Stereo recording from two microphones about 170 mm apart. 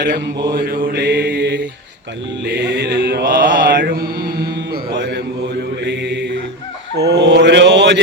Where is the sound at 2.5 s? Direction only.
75° right (ahead or behind).